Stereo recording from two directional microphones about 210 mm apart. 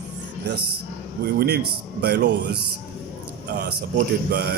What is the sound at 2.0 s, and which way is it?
Speech, 50° right (ahead or behind).